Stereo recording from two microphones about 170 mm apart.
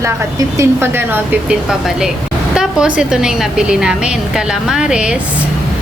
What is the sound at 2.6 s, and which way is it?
A woman's voice, 5° right (ahead or behind).